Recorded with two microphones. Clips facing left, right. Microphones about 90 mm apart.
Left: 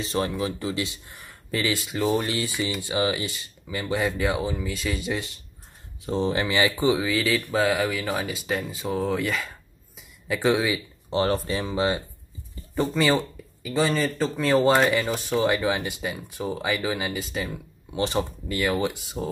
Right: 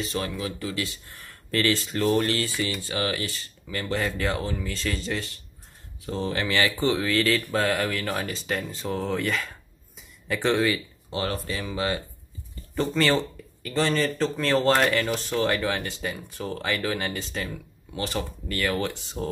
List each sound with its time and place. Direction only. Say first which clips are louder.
0.0 s speech: left 3 dB; 25° left (ahead or behind); by 9.5 s centre (ahead or behind)
9.9 s a sound: left 1 dB; 5° left (ahead or behind)
11.1 s speech: left 6 dB; 30° left (ahead or behind)
12.7 s speech: left 1 dB; 10° left (ahead or behind)
17.9 s speech: left 5 dB; 20° left (ahead or behind)